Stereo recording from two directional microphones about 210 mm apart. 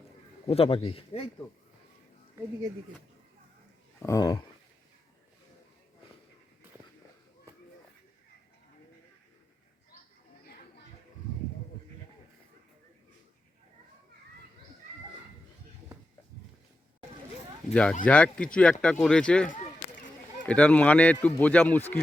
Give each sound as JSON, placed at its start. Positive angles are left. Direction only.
{"t": 0.4, "sound": "speech", "side_deg": 25}
{"t": 4.0, "sound": "a man's voice", "side_deg": 15}
{"t": 17.7, "sound": "speech", "side_deg": 5}
{"t": 19.5, "sound": "a sound", "side_deg": 40}
{"t": 20.5, "sound": "a man's voice", "side_deg": 5}